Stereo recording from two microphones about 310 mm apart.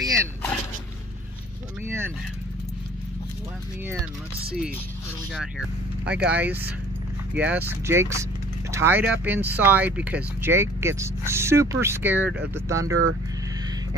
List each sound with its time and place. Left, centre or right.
0.0 s dog: centre
1.9 s speech: centre
5.3 s speech: centre